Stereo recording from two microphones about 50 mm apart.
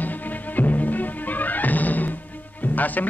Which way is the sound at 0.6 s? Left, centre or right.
Left.